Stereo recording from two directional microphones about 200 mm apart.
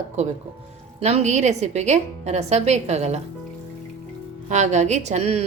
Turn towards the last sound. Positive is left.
turn(degrees=-30)  # may be behind; listen again after turning